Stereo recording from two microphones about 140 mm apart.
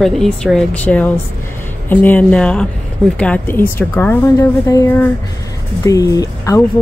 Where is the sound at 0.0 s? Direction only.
Centre (ahead or behind).